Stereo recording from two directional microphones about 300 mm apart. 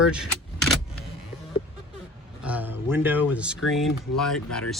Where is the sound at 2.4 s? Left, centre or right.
Centre.